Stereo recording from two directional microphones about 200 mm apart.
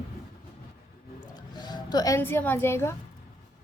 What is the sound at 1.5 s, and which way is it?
Speech, 20° left (ahead or behind).